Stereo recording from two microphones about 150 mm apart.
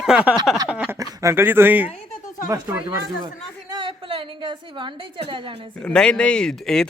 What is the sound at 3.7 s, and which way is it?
A woman's voice, 35° right (ahead or behind).